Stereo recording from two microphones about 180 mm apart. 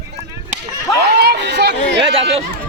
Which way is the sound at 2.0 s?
30° right (ahead or behind).